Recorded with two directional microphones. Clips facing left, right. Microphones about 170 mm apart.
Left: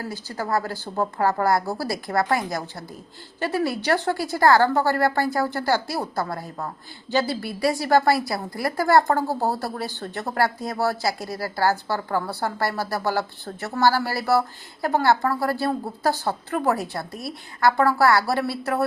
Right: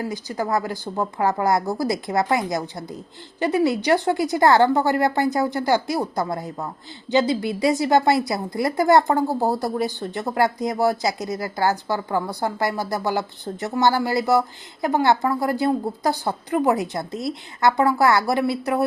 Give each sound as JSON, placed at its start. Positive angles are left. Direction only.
{"t": 0.0, "sound": "a woman's voice", "side_deg": -15}